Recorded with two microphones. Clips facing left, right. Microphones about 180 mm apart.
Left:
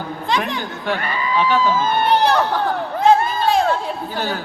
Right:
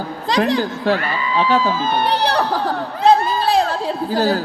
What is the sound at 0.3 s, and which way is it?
A woman's voice, 35° right (ahead or behind).